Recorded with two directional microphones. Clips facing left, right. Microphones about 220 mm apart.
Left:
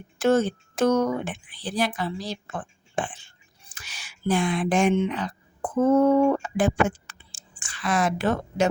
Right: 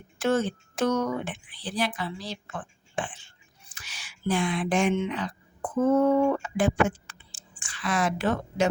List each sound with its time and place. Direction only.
0.2 s speech: 40° left (ahead or behind)